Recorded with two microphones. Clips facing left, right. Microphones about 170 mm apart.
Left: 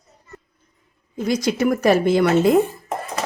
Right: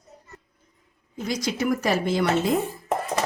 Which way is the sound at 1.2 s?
60° left (ahead or behind).